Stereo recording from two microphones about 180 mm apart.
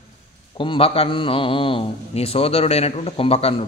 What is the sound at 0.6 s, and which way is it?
A man's voice, 30° left (ahead or behind).